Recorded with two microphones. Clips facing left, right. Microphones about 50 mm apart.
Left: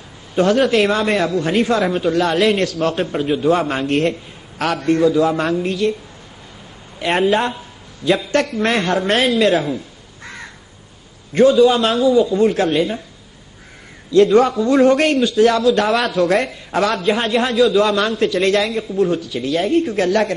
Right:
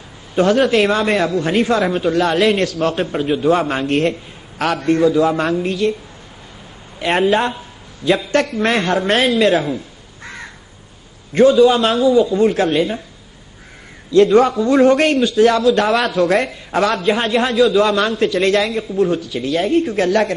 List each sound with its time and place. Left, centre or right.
0.4 s a man's voice: centre
7.0 s a man's voice: centre
10.2 s crow: centre
11.3 s a man's voice: centre
14.1 s a man's voice: centre